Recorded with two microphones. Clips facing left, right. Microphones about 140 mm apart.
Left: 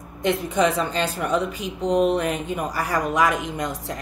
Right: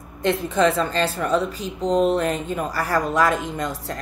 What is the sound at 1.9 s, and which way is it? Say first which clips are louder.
Speech: right 1 dB; 35° right (ahead or behind).